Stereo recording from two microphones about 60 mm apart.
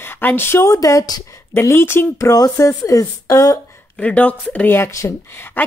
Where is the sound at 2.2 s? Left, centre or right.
Left.